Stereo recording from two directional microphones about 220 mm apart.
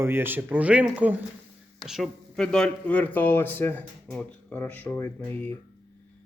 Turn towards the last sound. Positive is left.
turn(degrees=5)  # may be behind; listen again after turning